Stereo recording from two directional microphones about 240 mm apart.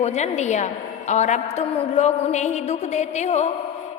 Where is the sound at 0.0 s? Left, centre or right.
Left.